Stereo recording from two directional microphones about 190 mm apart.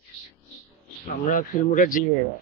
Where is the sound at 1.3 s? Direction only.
45° left (ahead or behind).